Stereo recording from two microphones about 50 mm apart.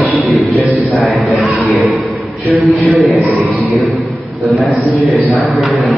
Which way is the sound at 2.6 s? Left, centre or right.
Right.